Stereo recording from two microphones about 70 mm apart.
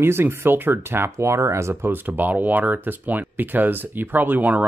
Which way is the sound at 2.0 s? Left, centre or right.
Right.